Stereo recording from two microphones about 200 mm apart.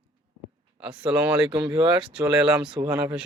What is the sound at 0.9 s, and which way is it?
Speech, 5° right (ahead or behind).